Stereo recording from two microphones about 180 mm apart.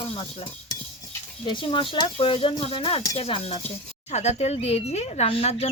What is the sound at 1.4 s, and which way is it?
Speech, 25° left (ahead or behind).